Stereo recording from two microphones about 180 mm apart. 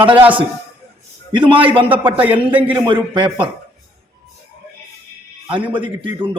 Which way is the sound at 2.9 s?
25° right (ahead or behind).